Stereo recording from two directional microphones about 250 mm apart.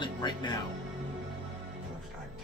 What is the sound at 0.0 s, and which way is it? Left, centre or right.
Music, centre.